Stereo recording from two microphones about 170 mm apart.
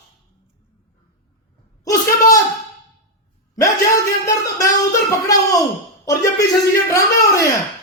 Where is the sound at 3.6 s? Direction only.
20° left (ahead or behind).